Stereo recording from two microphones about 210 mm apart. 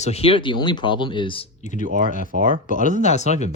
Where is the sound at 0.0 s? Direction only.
30° left (ahead or behind).